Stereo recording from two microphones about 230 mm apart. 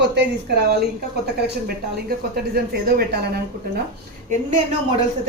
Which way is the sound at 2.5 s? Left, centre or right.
Right.